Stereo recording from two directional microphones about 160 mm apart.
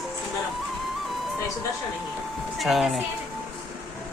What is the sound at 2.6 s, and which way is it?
Speech, centre (ahead or behind).